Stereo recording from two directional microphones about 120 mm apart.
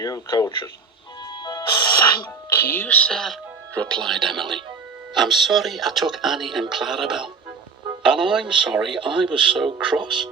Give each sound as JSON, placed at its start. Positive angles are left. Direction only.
{"t": 0.0, "sound": "speech", "side_deg": 30}
{"t": 1.3, "sound": "music", "side_deg": 35}
{"t": 2.5, "sound": "speech", "side_deg": 20}